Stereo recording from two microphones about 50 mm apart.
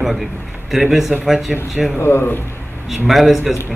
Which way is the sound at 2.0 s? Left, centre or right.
Left.